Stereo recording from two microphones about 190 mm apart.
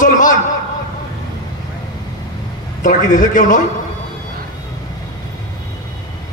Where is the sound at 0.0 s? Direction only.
45° left (ahead or behind).